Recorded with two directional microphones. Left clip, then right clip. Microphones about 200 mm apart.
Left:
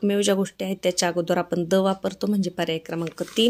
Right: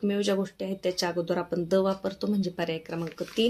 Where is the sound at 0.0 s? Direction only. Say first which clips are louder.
Left 5 dB; 40° left (ahead or behind).